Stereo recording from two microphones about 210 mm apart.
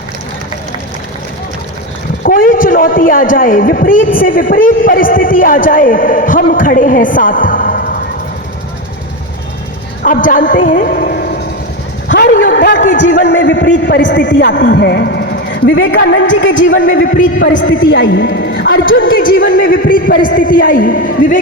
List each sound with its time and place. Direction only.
2.2 s a man's voice: 40° left (ahead or behind)
10.0 s a woman's voice: 40° left (ahead or behind)
12.0 s vehicle: 60° left (ahead or behind)
12.3 s a sound: 40° left (ahead or behind)
12.5 s a sound: 55° left (ahead or behind)
13.1 s a man's voice: 55° left (ahead or behind)
15.6 s a man's voice: 65° left (ahead or behind)
19.1 s a man's voice: 40° left (ahead or behind)